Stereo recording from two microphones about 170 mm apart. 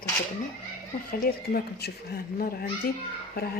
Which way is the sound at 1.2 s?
65° left (ahead or behind).